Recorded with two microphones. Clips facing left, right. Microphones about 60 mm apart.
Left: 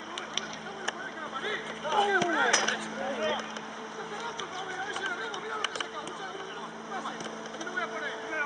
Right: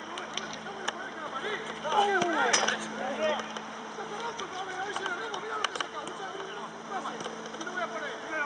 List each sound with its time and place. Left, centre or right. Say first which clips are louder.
1.4 s speech: even; centre
3.2 s speech: right 2 dB; centre